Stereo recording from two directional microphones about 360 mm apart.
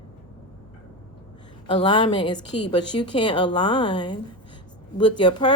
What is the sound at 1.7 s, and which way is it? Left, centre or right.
A woman's voice, centre.